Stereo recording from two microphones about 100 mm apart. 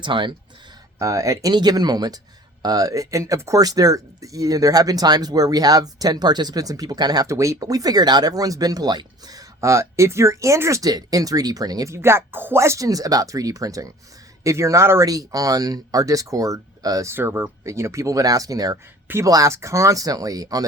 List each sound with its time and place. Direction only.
0.0 s speech: 55° right (ahead or behind)
0.9 s speech: 35° right (ahead or behind)
17.2 s speech: 20° right (ahead or behind); by 20.7 s 35° right (ahead or behind)